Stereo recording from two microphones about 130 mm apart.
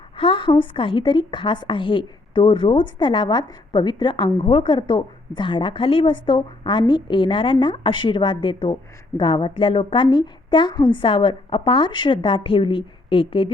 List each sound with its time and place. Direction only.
0.2 s a woman's voice: 40° left (ahead or behind)